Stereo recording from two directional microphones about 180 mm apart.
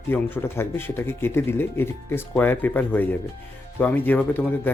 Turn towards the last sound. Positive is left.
turn(degrees=10)  # may be behind; listen again after turning